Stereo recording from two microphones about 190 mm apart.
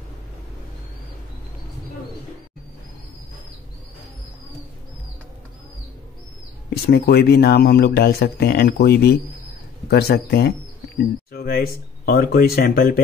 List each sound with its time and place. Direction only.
6.7 s speech: 55° left (ahead or behind)